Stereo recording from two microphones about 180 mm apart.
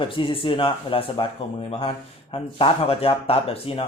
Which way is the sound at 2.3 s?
30° left (ahead or behind).